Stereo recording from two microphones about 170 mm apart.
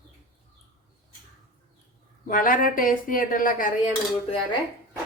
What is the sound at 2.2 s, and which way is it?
Speech, 55° left (ahead or behind).